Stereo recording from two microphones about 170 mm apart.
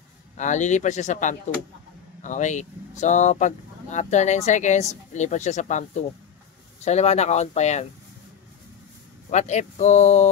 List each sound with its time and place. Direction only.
0.4 s speech: 45° left (ahead or behind)
9.3 s speech: 45° left (ahead or behind)